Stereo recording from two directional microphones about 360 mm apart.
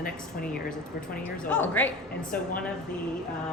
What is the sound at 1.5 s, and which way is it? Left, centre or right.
Speech, centre.